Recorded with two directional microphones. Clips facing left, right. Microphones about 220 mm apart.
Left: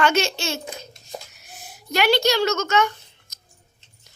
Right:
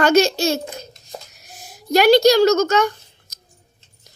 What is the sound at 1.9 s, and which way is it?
Speech, 40° right (ahead or behind).